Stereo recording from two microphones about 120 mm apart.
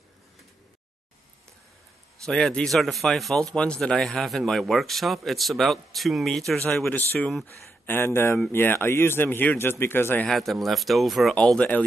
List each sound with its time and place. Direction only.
2.2 s a man's voice: 5° left (ahead or behind)
6.9 s speech: 15° left (ahead or behind)
10.2 s a man's voice: centre (ahead or behind)